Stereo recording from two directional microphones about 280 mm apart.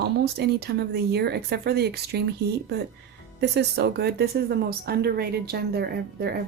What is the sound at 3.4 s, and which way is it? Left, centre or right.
A woman's voice, right.